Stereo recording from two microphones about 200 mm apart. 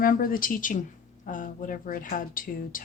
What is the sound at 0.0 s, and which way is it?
Speech, 45° left (ahead or behind).